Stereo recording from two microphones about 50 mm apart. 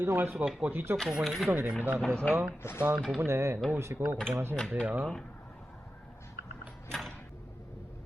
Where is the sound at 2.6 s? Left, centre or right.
Left.